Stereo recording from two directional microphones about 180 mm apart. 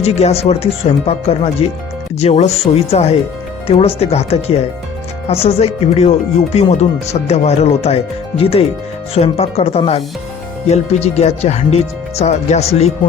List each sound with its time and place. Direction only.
0.0 s speech: 35° left (ahead or behind)